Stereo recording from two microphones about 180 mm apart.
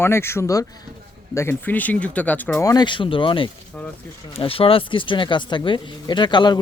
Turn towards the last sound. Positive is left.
turn(degrees=25)  # may be behind; listen again after turning